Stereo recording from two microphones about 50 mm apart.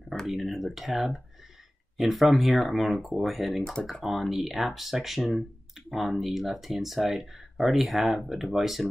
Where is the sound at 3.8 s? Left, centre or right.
Centre.